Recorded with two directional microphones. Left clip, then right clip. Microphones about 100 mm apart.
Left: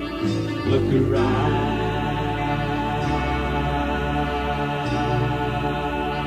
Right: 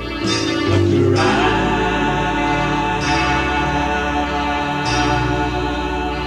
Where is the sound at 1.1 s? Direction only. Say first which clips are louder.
Right 6 dB; 25° left (ahead or behind).